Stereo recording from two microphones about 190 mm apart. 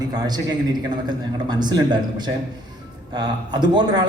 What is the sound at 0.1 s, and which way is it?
Speech, 20° right (ahead or behind).